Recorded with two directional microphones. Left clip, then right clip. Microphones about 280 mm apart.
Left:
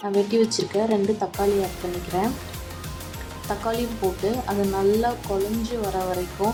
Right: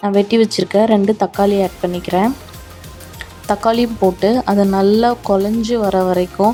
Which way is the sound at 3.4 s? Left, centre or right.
Right.